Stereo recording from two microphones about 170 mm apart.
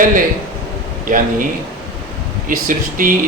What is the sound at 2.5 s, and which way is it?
Speech, 55° right (ahead or behind).